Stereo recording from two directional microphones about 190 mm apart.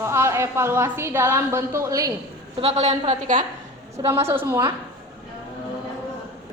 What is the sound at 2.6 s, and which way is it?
Speech, 35° right (ahead or behind).